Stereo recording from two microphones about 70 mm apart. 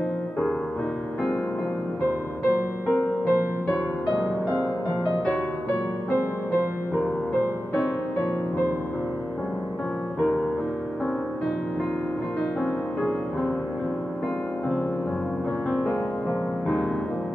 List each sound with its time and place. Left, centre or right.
3.3 s music: centre